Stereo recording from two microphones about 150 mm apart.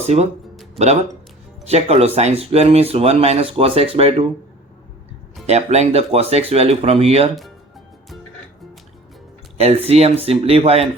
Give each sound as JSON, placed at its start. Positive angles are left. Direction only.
{"t": 0.0, "sound": "speech", "side_deg": -45}
{"t": 1.6, "sound": "speech", "side_deg": -45}
{"t": 5.5, "sound": "speech", "side_deg": -45}
{"t": 9.6, "sound": "speech", "side_deg": -40}